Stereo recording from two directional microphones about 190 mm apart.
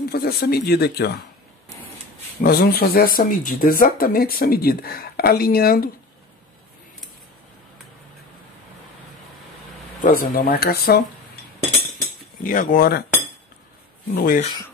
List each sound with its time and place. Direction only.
0.0 s speech: 55° left (ahead or behind)
2.4 s speech: 50° left (ahead or behind)
10.1 s speech: 50° left (ahead or behind)
12.0 s cutlery: 50° left (ahead or behind)
14.0 s speech: 55° left (ahead or behind)